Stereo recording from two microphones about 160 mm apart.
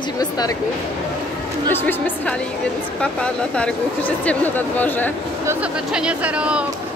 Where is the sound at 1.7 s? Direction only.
10° left (ahead or behind).